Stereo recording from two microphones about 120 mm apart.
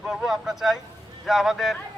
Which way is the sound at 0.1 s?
Centre (ahead or behind).